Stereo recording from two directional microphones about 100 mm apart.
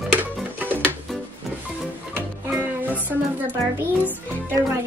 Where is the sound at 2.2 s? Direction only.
20° right (ahead or behind).